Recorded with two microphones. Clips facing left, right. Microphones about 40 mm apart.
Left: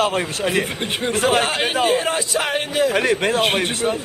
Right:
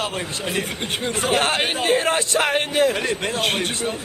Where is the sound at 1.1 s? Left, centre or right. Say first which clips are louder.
Left 4 dB; left.